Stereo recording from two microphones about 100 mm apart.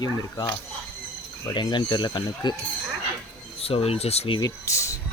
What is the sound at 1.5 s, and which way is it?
Speech, 50° left (ahead or behind).